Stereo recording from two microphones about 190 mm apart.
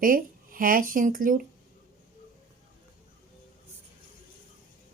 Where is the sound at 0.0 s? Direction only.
50° right (ahead or behind).